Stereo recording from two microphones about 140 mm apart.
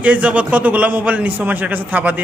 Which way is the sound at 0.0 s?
10° right (ahead or behind).